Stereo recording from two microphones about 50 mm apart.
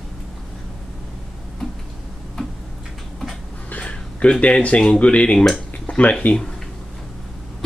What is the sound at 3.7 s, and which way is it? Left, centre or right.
Speech, left.